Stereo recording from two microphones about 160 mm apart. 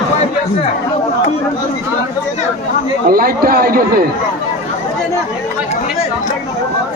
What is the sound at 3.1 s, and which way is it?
Speech, 70° right (ahead or behind).